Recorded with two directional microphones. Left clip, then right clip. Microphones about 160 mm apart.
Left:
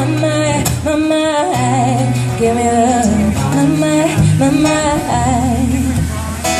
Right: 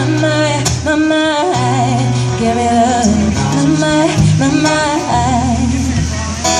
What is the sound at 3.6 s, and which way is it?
Music, 15° left (ahead or behind).